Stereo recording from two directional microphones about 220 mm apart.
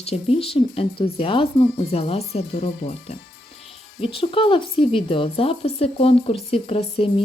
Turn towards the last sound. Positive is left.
turn(degrees=25)  # may be behind; listen again after turning